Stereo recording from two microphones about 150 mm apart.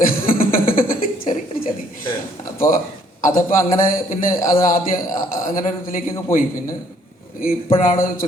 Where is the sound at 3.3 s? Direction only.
70° left (ahead or behind).